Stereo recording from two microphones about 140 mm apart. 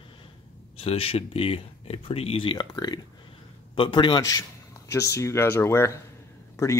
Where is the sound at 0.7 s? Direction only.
45° left (ahead or behind).